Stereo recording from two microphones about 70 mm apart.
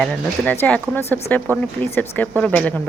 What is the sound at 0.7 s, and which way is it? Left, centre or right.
Speech, left.